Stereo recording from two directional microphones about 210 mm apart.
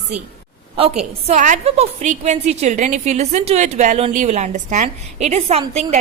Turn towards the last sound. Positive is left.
turn(degrees=-30)  # may be behind; listen again after turning